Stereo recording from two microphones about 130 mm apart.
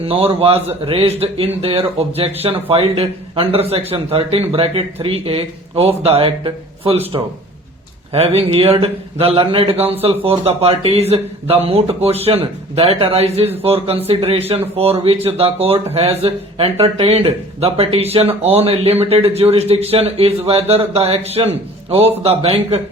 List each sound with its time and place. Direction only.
0.0 s a man's voice: 50° right (ahead or behind)
8.1 s a man's voice: 50° right (ahead or behind)